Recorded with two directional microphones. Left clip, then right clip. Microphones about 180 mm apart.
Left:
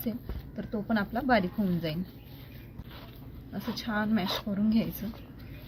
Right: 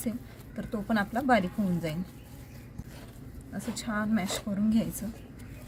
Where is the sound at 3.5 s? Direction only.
5° right (ahead or behind).